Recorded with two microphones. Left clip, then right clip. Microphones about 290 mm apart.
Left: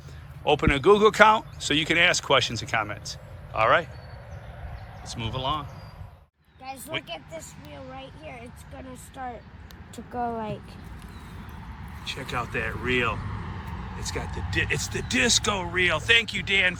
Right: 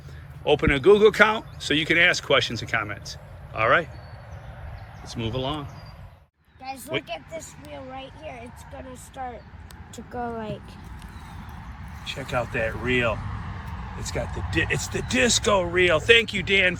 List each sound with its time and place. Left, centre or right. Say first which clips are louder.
0.4 s speech: right 2 dB; centre
5.1 s speech: even; centre
12.0 s speech: right 3 dB; centre